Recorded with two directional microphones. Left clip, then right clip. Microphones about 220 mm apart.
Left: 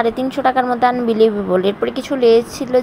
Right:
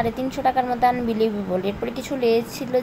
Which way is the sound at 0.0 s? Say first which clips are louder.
Left 6 dB; 20° left (ahead or behind).